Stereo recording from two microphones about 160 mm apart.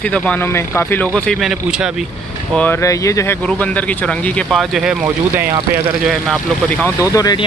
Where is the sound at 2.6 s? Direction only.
15° left (ahead or behind).